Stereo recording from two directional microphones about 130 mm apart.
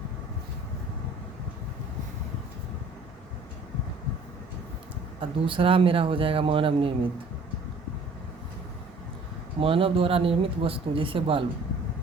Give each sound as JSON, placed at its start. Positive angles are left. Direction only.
{"t": 5.2, "sound": "speech", "side_deg": -40}
{"t": 9.6, "sound": "speech", "side_deg": -45}